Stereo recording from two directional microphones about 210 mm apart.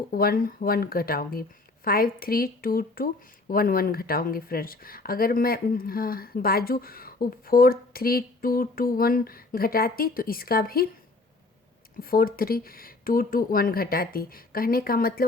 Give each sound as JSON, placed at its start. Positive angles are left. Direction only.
{"t": 0.1, "sound": "speech", "side_deg": 45}
{"t": 11.9, "sound": "speech", "side_deg": 45}